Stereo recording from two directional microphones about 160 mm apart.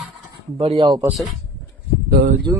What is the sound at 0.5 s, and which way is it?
Speech, 35° right (ahead or behind).